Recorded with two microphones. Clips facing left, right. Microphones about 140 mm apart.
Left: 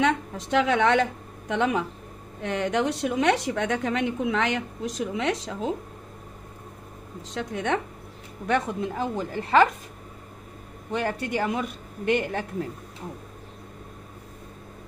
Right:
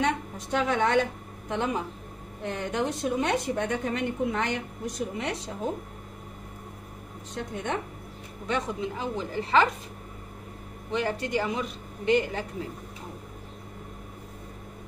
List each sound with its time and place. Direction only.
0.0 s a woman's voice: 90° left
1.5 s a woman's voice: 80° left
7.3 s a woman's voice: 80° left
8.5 s speech: 55° left (ahead or behind)
10.9 s speech: 50° left (ahead or behind)